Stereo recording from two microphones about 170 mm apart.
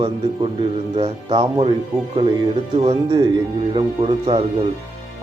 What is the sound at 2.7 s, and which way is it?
Speech, 35° right (ahead or behind).